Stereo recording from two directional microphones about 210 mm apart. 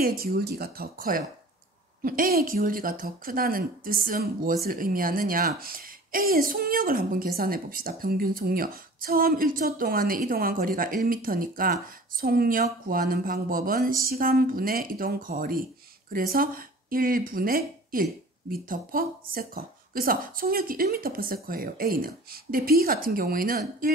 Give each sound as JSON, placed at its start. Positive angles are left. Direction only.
{"t": 0.0, "sound": "a woman's voice", "side_deg": -45}